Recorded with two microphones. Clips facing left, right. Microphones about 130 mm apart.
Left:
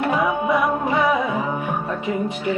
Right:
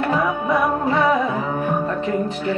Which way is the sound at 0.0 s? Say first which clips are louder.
Even; 15° left (ahead or behind).